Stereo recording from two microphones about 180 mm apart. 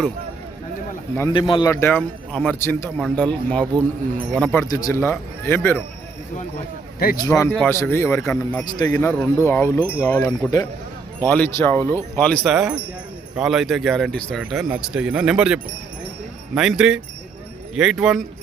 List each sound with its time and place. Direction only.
1.3 s a man's voice: 25° left (ahead or behind); by 4.6 s 5° left (ahead or behind)
4.6 s a man's voice: 20° left (ahead or behind)
7.3 s a man's voice: 15° left (ahead or behind); by 18.3 s 5° right (ahead or behind)